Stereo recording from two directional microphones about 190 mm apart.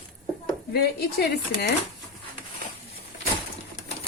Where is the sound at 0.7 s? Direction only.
55° left (ahead or behind).